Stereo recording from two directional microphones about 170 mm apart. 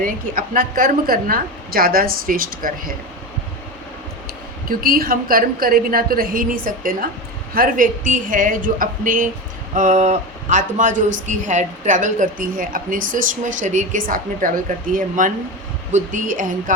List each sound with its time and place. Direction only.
0.0 s a woman's voice: 55° right (ahead or behind)
4.7 s a woman's voice: 60° right (ahead or behind)